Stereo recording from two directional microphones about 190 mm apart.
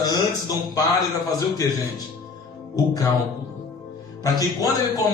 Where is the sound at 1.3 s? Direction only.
20° left (ahead or behind).